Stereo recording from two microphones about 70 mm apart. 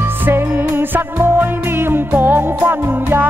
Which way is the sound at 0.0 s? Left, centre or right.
Right.